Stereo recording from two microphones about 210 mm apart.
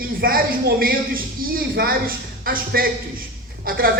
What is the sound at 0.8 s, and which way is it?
A man's voice, 45° right (ahead or behind).